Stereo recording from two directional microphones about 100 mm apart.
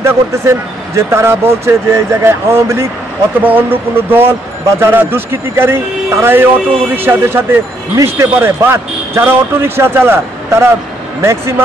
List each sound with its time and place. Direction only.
0.0 s speech: 30° right (ahead or behind)
3.9 s speech: 20° right (ahead or behind)